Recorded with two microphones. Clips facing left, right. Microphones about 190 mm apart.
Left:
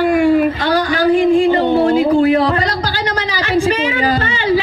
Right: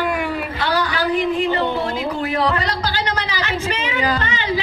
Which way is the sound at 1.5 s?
40° left (ahead or behind).